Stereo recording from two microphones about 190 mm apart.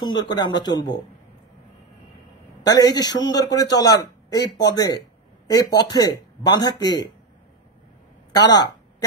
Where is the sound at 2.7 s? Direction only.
20° left (ahead or behind).